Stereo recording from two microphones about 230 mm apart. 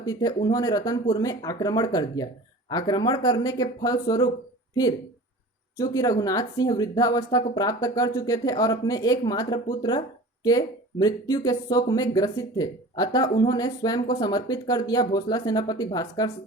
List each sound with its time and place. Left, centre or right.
0.0 s speech: centre